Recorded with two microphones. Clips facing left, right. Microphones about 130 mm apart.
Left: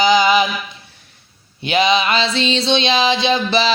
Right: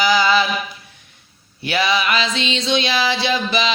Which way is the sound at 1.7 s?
20° left (ahead or behind).